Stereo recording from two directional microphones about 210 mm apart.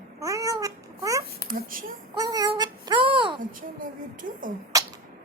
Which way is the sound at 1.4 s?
40° right (ahead or behind).